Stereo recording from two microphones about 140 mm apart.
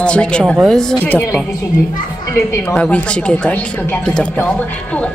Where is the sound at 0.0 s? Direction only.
5° left (ahead or behind).